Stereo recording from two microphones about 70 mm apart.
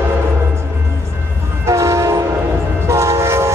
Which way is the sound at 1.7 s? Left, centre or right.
Right.